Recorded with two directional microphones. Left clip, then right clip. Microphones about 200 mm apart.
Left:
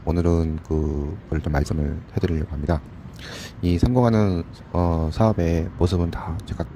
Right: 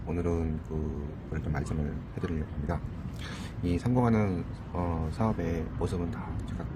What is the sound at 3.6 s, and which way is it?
Speech, 45° left (ahead or behind).